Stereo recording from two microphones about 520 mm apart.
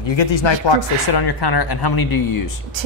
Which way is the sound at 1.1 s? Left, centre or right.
Left.